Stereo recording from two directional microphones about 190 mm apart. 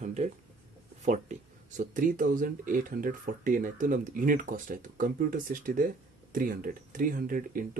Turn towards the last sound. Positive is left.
turn(degrees=-45)  # may be behind; listen again after turning